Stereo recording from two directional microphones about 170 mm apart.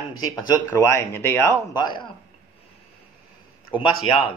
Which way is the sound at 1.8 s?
25° left (ahead or behind).